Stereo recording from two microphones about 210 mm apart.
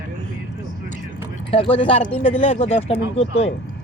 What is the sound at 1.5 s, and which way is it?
Speech, 25° left (ahead or behind).